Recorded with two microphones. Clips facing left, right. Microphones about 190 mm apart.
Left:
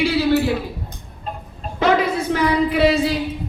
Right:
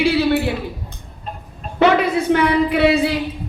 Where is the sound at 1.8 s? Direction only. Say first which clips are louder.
Right 3 dB; 65° right (ahead or behind).